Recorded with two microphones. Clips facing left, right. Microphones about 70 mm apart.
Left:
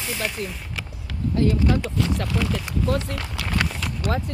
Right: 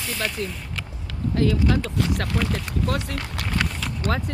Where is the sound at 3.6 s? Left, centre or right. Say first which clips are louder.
Left 1 dB; centre.